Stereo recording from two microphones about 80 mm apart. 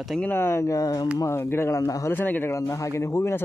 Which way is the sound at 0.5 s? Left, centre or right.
Left.